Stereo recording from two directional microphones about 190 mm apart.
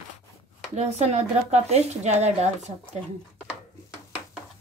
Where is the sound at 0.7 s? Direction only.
35° right (ahead or behind).